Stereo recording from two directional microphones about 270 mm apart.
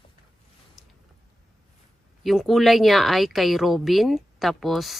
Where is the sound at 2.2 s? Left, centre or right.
Centre.